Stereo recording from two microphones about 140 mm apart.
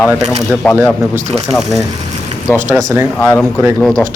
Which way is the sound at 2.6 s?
15° right (ahead or behind).